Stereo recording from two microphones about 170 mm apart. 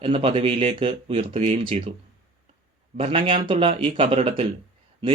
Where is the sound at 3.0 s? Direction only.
30° right (ahead or behind).